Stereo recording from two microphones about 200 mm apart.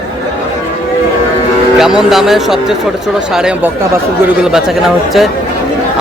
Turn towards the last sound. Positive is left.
turn(degrees=0)  # may be behind; listen again after turning